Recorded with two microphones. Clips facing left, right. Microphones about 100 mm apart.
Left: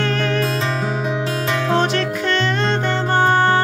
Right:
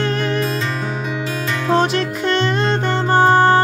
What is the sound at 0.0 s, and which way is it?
Music, 20° right (ahead or behind).